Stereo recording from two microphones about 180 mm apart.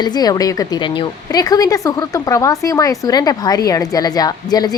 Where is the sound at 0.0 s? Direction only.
20° left (ahead or behind).